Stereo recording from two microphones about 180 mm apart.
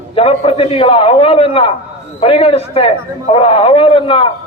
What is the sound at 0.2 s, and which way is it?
A man's voice, 35° left (ahead or behind).